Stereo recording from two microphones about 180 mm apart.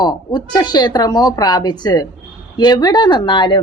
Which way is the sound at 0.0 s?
20° left (ahead or behind).